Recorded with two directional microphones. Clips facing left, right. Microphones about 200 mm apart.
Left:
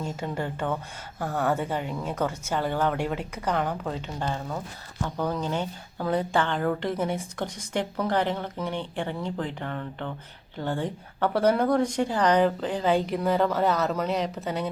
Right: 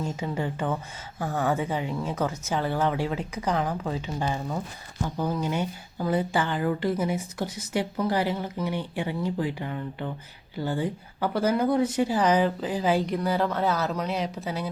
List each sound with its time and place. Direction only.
0.0 s speech: 5° right (ahead or behind)